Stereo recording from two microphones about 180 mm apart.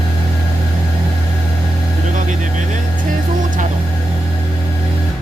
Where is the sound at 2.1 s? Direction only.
45° right (ahead or behind).